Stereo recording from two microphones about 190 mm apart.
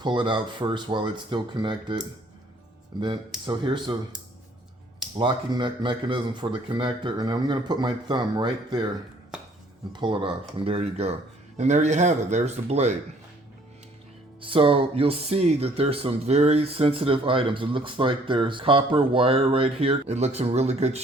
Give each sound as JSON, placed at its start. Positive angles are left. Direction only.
{"t": 0.0, "sound": "speech", "side_deg": -25}
{"t": 3.0, "sound": "speech", "side_deg": -25}
{"t": 5.1, "sound": "speech", "side_deg": -25}
{"t": 9.9, "sound": "speech", "side_deg": -25}
{"t": 14.4, "sound": "speech", "side_deg": -25}